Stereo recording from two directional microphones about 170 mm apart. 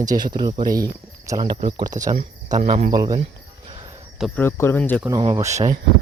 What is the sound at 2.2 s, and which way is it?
Cricket, 40° right (ahead or behind).